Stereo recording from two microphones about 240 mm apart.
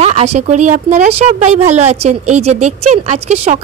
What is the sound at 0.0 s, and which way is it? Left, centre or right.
A woman's voice, right.